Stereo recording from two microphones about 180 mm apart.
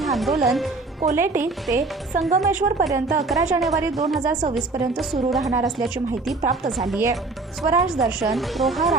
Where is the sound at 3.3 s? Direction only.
Centre (ahead or behind).